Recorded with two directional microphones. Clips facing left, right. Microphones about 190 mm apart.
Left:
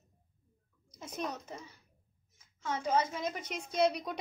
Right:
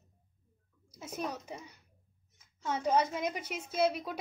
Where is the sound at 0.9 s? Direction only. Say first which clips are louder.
Right 1 dB; 10° right (ahead or behind).